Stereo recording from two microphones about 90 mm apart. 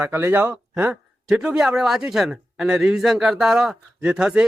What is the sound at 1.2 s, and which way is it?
A man's voice, 5° right (ahead or behind).